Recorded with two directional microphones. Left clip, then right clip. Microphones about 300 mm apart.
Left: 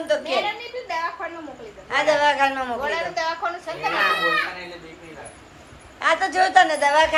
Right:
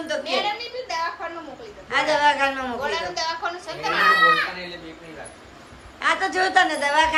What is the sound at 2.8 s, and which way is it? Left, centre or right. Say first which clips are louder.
Speech: left 1 dB; left.